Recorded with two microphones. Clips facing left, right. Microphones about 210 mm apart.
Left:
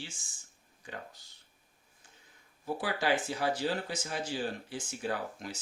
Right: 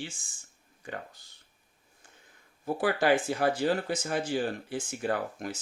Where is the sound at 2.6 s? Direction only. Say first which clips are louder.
Right 6 dB; 55° right (ahead or behind).